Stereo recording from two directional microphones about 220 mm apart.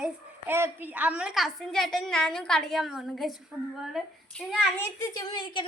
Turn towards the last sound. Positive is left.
turn(degrees=20)  # may be behind; listen again after turning